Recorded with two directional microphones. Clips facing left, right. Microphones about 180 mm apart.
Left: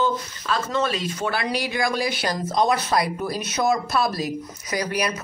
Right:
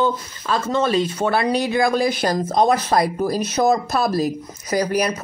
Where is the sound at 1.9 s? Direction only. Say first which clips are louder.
Right 6 dB; 45° right (ahead or behind).